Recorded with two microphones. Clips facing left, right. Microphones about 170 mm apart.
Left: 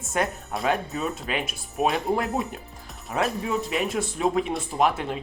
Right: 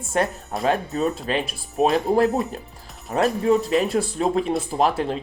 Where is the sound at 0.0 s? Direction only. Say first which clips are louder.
Right 3 dB; 30° right (ahead or behind).